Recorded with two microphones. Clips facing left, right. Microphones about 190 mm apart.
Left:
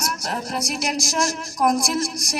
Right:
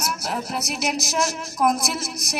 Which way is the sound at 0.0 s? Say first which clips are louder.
Even; 5° right (ahead or behind).